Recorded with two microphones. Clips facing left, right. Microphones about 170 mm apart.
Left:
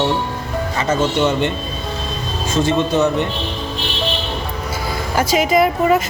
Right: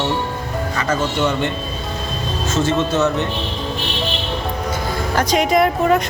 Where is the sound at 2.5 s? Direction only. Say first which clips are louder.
Left 2 dB; 15° left (ahead or behind).